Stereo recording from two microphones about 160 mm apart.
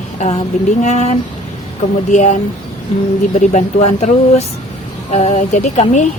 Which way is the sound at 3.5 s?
45° left (ahead or behind).